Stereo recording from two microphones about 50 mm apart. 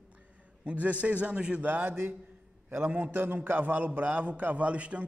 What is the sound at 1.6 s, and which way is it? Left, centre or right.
A man's voice, right.